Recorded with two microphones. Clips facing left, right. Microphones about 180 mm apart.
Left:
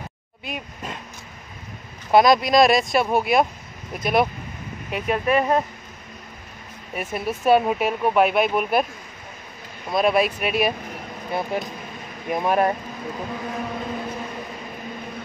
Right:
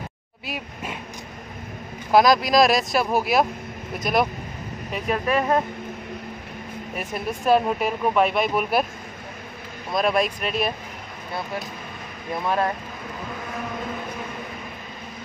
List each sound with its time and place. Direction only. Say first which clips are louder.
0.5 s speech: even; 5° right (ahead or behind)
2.1 s speech: left 1 dB; centre (ahead or behind)
7.0 s speech: left 3 dB; centre (ahead or behind)
9.9 s speech: left 2 dB; 5° left (ahead or behind)
11.3 s speech: left 5 dB; 20° left (ahead or behind)